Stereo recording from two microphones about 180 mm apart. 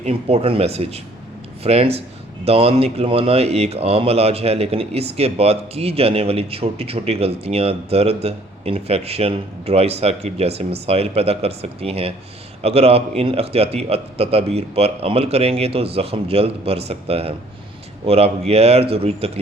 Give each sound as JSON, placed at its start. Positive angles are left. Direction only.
{"t": 0.0, "sound": "a man's voice", "side_deg": -35}